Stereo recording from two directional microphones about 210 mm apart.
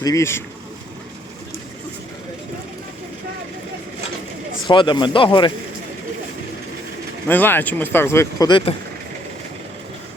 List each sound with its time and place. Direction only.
0.0 s speech: 15° left (ahead or behind)
4.6 s speech: 20° left (ahead or behind)
7.3 s speech: 10° left (ahead or behind)